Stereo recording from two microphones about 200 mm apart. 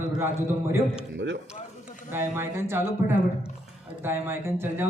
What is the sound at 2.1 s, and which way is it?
Speech, 10° right (ahead or behind).